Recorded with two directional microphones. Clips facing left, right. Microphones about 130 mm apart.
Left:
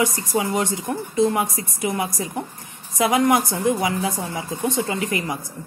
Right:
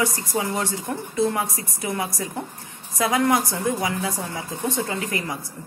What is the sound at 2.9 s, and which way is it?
A woman's voice, 20° left (ahead or behind).